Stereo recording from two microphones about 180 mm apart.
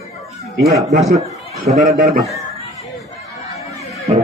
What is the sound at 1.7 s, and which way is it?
Speech, 50° right (ahead or behind).